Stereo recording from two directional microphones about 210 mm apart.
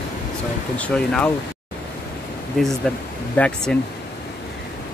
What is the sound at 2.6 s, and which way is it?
Speech, 5° left (ahead or behind).